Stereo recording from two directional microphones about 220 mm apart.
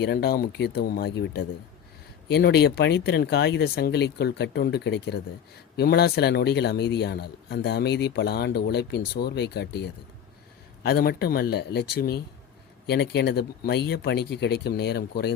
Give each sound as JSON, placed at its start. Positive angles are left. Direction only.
{"t": 0.0, "sound": "a man's voice", "side_deg": 45}